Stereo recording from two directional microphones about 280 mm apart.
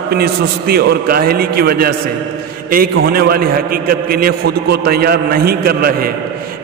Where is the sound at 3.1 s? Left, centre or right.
Right.